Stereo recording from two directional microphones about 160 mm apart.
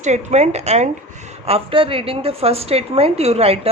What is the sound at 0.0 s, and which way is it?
A woman's voice, 45° right (ahead or behind).